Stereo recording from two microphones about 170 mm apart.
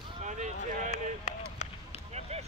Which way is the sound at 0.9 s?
45° left (ahead or behind).